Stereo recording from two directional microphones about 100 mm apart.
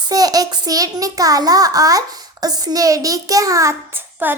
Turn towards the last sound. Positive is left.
turn(degrees=-20)  # may be behind; listen again after turning